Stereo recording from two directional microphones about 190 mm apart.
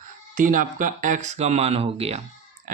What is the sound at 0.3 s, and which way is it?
Speech, 45° right (ahead or behind).